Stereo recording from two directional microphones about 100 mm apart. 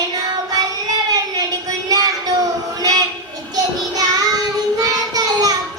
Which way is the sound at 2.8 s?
40° right (ahead or behind).